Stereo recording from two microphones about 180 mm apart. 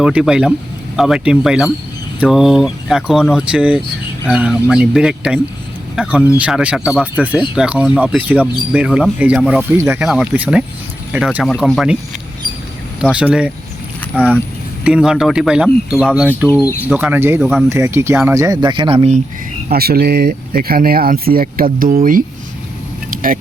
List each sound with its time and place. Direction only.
0.0 s speech: 5° right (ahead or behind)
13.0 s speech: 5° right (ahead or behind)
17.4 s speech: centre (ahead or behind)
17.7 s speech: 15° right (ahead or behind)
19.6 s speech: 60° right (ahead or behind)